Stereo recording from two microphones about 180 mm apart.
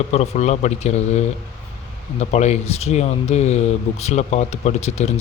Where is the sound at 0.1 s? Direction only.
35° left (ahead or behind).